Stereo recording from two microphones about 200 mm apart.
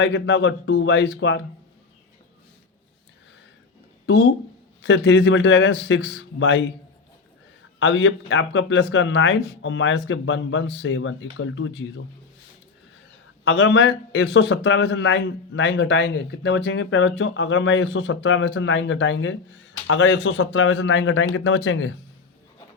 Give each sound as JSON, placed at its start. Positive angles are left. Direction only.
{"t": 0.0, "sound": "a man's voice", "side_deg": 65}
{"t": 4.0, "sound": "a man's voice", "side_deg": 55}
{"t": 7.8, "sound": "speech", "side_deg": 65}
{"t": 13.4, "sound": "a man's voice", "side_deg": 65}